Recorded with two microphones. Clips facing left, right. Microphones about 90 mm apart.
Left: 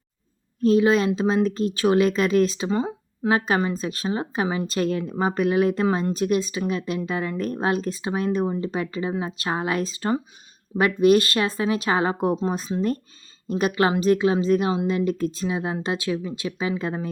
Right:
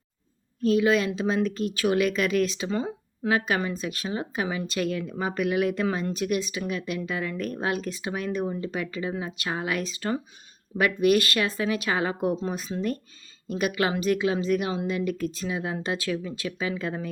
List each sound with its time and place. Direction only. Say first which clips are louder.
0.6 s speech: left 4 dB; 30° left (ahead or behind)
3.2 s speech: left 4 dB; 30° left (ahead or behind)